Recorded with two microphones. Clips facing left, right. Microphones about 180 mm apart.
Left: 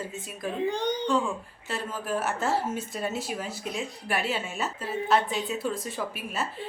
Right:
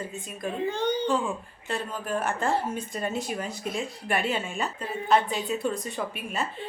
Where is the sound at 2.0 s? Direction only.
5° left (ahead or behind).